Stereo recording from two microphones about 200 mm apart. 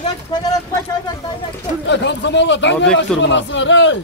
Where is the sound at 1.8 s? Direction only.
60° left (ahead or behind).